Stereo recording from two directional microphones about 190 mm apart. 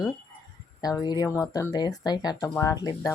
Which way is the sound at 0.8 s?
20° left (ahead or behind).